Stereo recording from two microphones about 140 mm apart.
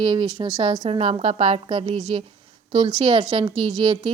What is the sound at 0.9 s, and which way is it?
A woman's voice, 50° right (ahead or behind).